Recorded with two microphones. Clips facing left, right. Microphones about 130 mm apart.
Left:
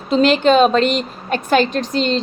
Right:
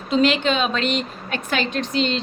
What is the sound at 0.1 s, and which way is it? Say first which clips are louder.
A woman's voice: left 6 dB; 40° left (ahead or behind).